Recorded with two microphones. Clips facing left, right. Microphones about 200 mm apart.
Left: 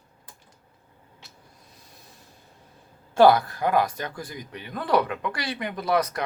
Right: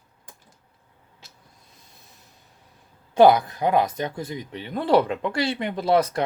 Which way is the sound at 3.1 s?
20° right (ahead or behind).